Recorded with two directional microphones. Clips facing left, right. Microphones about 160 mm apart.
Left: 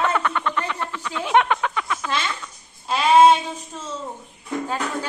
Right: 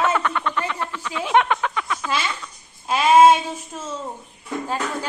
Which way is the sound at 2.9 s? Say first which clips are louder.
Right 1 dB; 5° right (ahead or behind).